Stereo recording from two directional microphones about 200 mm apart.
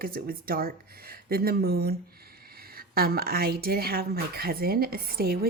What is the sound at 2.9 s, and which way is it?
Speech, 50° right (ahead or behind).